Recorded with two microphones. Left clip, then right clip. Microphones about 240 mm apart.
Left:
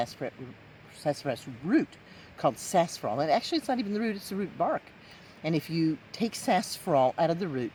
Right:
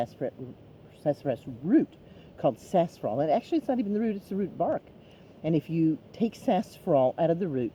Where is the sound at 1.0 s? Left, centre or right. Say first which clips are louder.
Right 2 dB; left.